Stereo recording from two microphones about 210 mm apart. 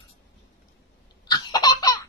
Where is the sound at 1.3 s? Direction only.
20° left (ahead or behind).